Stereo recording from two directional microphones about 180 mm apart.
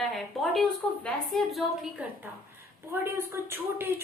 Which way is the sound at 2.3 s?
10° right (ahead or behind).